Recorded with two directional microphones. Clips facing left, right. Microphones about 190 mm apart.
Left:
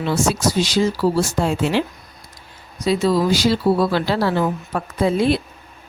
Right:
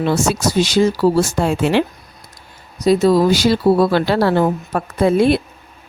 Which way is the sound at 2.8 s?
45° right (ahead or behind).